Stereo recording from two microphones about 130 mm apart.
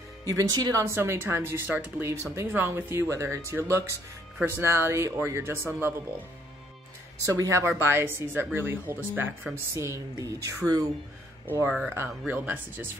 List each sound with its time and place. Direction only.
0.2 s speech: 25° right (ahead or behind)
7.2 s speech: 25° right (ahead or behind)
11.6 s speech: 5° right (ahead or behind)